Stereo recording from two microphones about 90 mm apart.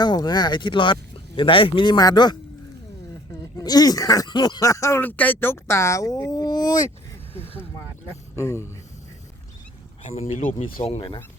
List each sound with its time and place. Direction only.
0.0 s speech: 50° left (ahead or behind)
2.0 s speech: 50° left (ahead or behind)
3.6 s speech: 45° left (ahead or behind)
4.3 s a sound: 55° left (ahead or behind)
4.6 s speech: 35° left (ahead or behind)
5.0 s speech: 20° left (ahead or behind); by 6.8 s 50° left (ahead or behind)
8.4 s speech: 30° left (ahead or behind)
10.8 s speech: 75° left (ahead or behind)